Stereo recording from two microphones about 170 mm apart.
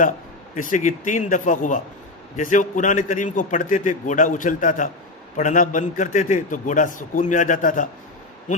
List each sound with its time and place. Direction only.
0.5 s a man's voice: 50° left (ahead or behind)